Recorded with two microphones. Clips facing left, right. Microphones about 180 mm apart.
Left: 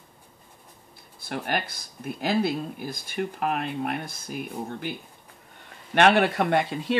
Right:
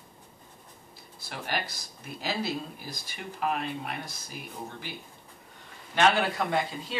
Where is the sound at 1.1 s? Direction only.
55° left (ahead or behind).